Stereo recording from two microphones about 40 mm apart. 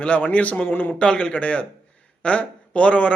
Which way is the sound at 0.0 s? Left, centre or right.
Left.